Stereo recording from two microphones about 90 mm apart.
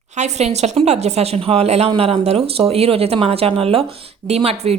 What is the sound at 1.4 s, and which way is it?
Speech, 90° right.